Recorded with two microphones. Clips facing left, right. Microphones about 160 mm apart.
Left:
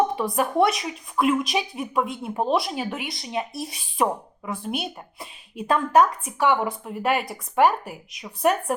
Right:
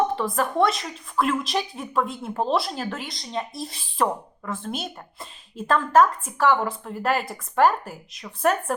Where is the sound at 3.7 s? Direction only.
Centre (ahead or behind).